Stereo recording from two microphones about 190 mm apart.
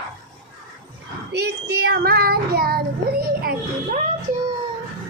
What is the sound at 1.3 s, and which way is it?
Child singing, 60° right (ahead or behind).